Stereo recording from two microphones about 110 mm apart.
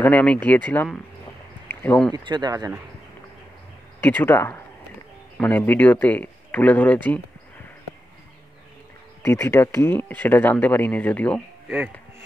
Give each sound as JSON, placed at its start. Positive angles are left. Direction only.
{"t": 0.0, "sound": "speech", "side_deg": 15}
{"t": 1.7, "sound": "a sound", "side_deg": 20}
{"t": 2.1, "sound": "speech", "side_deg": -40}
{"t": 4.0, "sound": "speech", "side_deg": 20}
{"t": 5.7, "sound": "speech", "side_deg": 15}
{"t": 9.2, "sound": "speech", "side_deg": 25}